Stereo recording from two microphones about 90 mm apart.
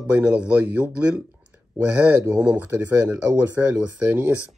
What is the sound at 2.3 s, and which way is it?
Speech, 20° right (ahead or behind).